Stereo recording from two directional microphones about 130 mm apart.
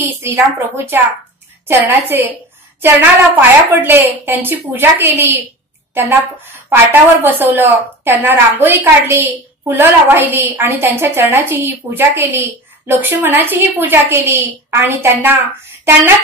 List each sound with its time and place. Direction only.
0.2 s a woman's voice: 20° right (ahead or behind)
3.3 s a woman's voice: 15° right (ahead or behind)